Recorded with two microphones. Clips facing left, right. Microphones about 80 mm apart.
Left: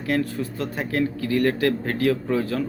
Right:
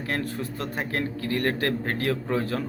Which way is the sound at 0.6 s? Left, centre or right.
Right.